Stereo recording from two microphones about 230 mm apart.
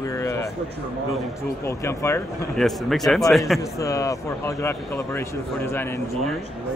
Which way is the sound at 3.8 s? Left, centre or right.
Centre.